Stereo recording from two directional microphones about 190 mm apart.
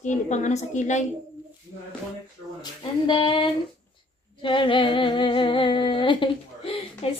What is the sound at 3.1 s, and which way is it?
Child singing, 25° left (ahead or behind).